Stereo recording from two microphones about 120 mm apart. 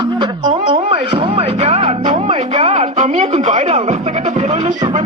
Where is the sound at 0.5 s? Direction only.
50° right (ahead or behind); by 5.0 s 80° right.